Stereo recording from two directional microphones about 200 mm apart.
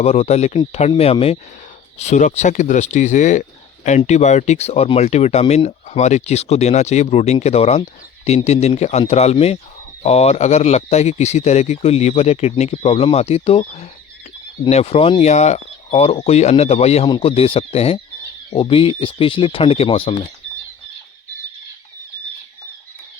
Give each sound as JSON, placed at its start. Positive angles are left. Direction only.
{"t": 0.0, "sound": "speech", "side_deg": 30}